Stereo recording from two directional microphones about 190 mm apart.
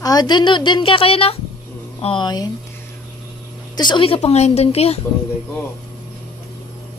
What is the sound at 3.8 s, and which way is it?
A woman's voice, 25° left (ahead or behind).